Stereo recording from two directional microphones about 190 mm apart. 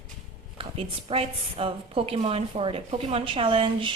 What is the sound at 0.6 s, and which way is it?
A woman's voice, 30° right (ahead or behind).